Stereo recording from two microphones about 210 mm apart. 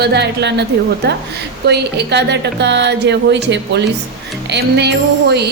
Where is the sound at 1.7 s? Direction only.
55° right (ahead or behind).